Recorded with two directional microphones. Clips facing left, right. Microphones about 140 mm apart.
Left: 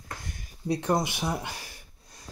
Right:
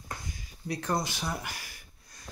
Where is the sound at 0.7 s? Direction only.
25° left (ahead or behind).